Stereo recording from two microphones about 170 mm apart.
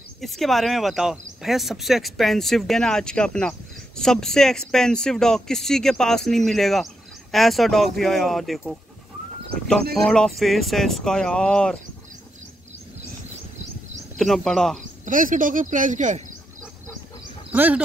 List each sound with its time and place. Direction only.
0.2 s speech: centre (ahead or behind)
9.9 s speech: 5° left (ahead or behind)
14.1 s speech: centre (ahead or behind)
15.0 s speech: 50° right (ahead or behind)
17.5 s speech: 10° right (ahead or behind)